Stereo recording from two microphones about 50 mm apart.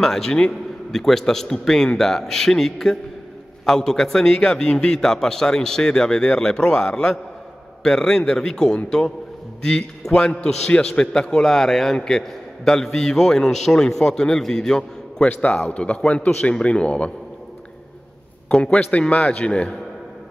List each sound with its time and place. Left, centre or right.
0.0 s a man's voice: centre
15.7 s a man's voice: left
18.5 s a man's voice: centre